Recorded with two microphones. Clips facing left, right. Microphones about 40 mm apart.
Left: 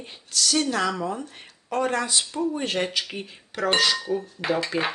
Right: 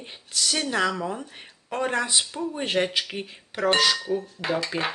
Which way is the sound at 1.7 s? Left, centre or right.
Centre.